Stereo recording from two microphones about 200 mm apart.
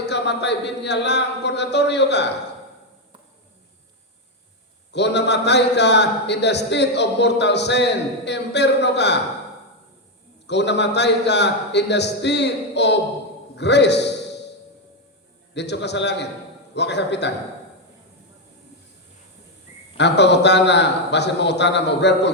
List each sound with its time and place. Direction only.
0.0 s a man's voice: 60° left (ahead or behind)
4.9 s a man's voice: 60° left (ahead or behind)
10.4 s a man's voice: 60° left (ahead or behind)
15.5 s a man's voice: 60° left (ahead or behind)
20.0 s a man's voice: 60° left (ahead or behind)